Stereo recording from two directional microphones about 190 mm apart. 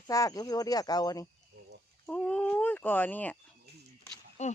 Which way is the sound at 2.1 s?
5° left (ahead or behind).